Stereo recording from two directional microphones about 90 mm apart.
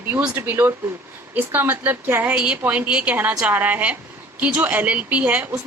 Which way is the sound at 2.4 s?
15° right (ahead or behind).